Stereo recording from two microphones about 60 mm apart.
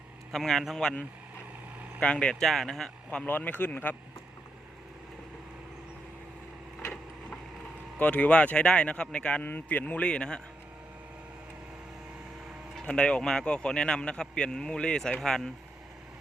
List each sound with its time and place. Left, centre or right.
0.3 s a man's voice: centre
2.0 s speech: centre
2.4 s a man's voice: centre
3.2 s speech: left
7.9 s speech: left
12.9 s a man's voice: centre